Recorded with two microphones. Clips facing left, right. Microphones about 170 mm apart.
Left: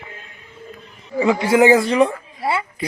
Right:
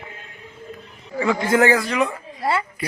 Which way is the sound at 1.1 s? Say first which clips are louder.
Left 3 dB; 15° left (ahead or behind).